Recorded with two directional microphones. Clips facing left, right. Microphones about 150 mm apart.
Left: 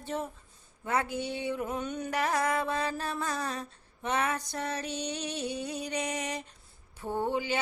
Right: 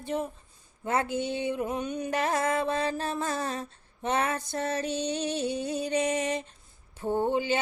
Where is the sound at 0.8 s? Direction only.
25° right (ahead or behind).